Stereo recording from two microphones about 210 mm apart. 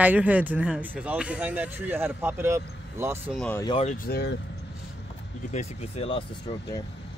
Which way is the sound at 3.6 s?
25° left (ahead or behind).